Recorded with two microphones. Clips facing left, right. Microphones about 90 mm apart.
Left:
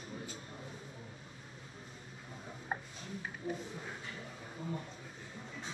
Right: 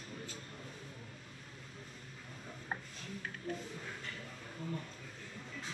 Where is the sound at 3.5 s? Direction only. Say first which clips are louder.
Left 2 dB; 10° left (ahead or behind).